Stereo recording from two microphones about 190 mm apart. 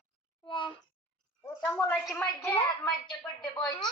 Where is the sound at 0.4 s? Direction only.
25° left (ahead or behind).